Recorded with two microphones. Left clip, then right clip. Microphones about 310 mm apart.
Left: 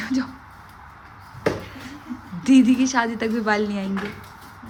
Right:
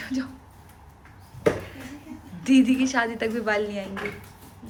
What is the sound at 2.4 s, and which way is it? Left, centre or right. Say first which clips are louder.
A woman's voice: left 3 dB; centre.